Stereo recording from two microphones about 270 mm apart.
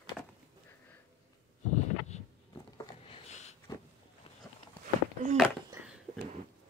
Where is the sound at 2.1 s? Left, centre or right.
Left.